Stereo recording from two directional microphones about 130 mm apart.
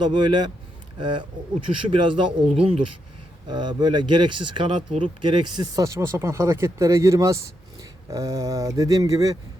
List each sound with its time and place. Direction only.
0.0 s speech: 35° right (ahead or behind)
3.5 s speech: 35° right (ahead or behind)